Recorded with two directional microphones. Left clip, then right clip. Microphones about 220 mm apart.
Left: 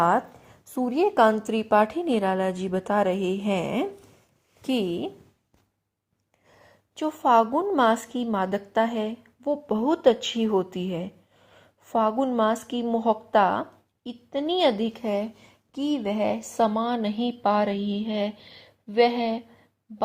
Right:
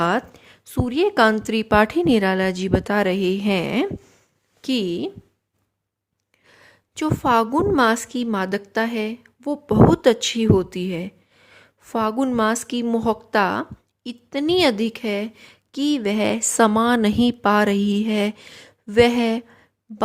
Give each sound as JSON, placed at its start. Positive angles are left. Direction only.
{"t": 0.0, "sound": "a sound", "side_deg": -30}
{"t": 0.9, "sound": "a woman's voice", "side_deg": -35}
{"t": 6.5, "sound": "a woman's voice", "side_deg": -35}